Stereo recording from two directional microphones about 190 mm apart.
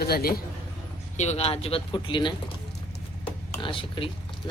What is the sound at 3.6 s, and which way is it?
Speech, 25° left (ahead or behind).